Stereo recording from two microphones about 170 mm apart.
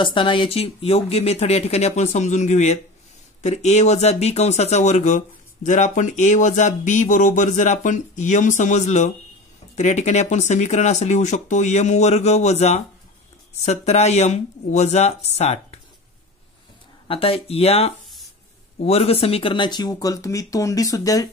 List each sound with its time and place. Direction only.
0.0 s speech: 30° left (ahead or behind)
17.1 s speech: 35° left (ahead or behind)